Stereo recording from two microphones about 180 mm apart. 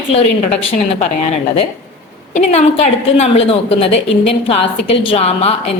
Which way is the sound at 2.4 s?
40° left (ahead or behind).